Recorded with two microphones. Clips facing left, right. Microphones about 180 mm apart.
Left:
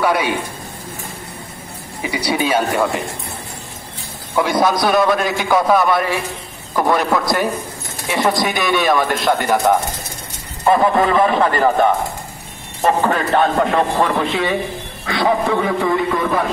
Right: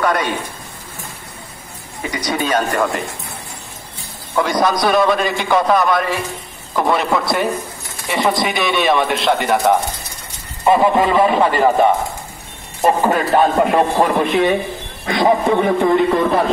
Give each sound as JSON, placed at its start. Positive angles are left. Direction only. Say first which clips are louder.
{"t": 0.0, "sound": "a man's voice", "louder": "left 1 dB", "side_deg": 10}
{"t": 2.0, "sound": "speech", "louder": "left 1 dB", "side_deg": 10}
{"t": 4.4, "sound": "a man's voice", "louder": "even", "side_deg": 5}